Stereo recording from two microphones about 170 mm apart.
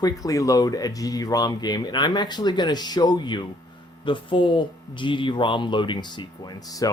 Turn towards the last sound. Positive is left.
turn(degrees=20)  # may be behind; listen again after turning